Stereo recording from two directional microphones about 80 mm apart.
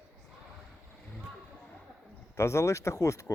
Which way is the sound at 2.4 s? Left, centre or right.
Left.